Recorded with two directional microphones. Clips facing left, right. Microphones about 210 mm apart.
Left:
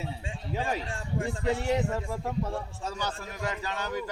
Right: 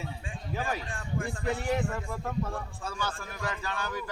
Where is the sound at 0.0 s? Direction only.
25° left (ahead or behind).